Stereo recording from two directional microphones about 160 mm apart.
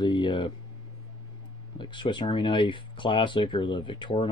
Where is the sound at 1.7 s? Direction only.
30° left (ahead or behind).